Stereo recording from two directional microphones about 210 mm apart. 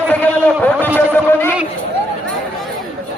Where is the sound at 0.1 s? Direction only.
10° left (ahead or behind).